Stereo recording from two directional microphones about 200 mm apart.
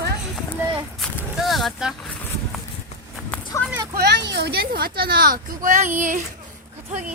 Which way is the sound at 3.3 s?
5° left (ahead or behind).